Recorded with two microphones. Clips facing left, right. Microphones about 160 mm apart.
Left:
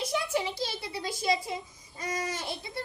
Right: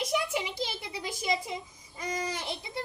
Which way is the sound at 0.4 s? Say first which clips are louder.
Left 1 dB; 15° right (ahead or behind).